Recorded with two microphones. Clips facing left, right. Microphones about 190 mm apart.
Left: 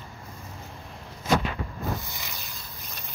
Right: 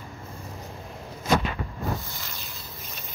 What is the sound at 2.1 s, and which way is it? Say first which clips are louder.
Vehicle: even; 15° left (ahead or behind).